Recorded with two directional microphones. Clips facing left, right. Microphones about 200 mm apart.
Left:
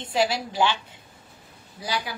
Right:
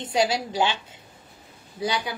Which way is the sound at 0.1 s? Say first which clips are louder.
Right 1 dB; 20° right (ahead or behind).